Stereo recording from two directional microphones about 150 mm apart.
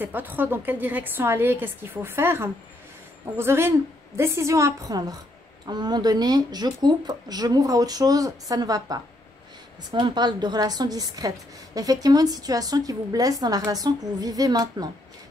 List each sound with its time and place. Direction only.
0.0 s a woman's voice: 10° right (ahead or behind)